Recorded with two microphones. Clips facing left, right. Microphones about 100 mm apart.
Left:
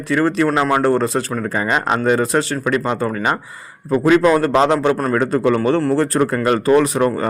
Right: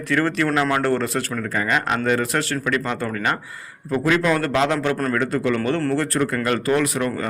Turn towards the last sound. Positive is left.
turn(degrees=30)  # may be behind; listen again after turning